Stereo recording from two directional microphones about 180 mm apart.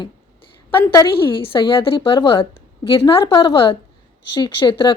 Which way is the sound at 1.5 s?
30° left (ahead or behind).